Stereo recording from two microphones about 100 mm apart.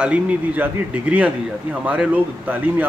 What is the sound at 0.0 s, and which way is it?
Speech, 10° right (ahead or behind).